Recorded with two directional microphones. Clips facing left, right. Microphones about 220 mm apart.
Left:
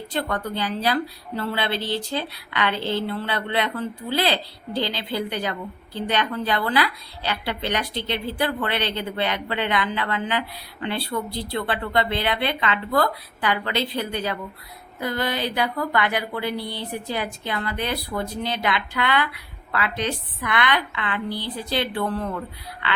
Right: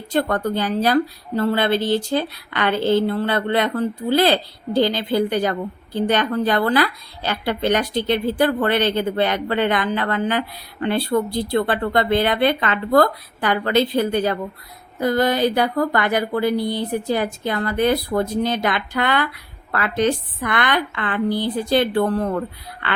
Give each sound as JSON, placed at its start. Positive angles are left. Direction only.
{"t": 0.1, "sound": "speech", "side_deg": -45}